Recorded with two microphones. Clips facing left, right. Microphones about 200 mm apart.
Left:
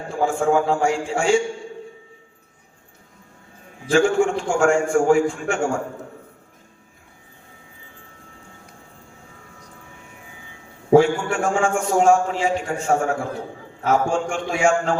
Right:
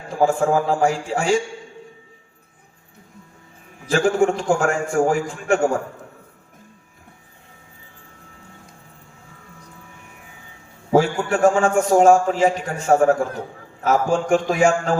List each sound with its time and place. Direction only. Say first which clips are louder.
0.1 s a man's voice: right 1 dB; 35° right (ahead or behind)
3.9 s a man's voice: even; 35° right (ahead or behind)
10.9 s a man's voice: left 2 dB; 35° right (ahead or behind)